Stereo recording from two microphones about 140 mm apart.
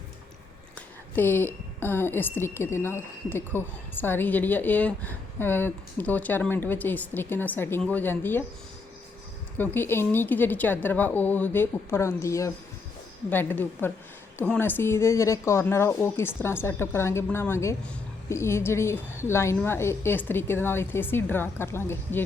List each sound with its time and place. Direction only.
1.1 s a woman's voice: 15° left (ahead or behind)
9.6 s a woman's voice: 15° left (ahead or behind)